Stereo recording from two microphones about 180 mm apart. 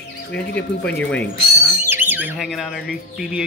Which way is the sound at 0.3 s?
70° left (ahead or behind).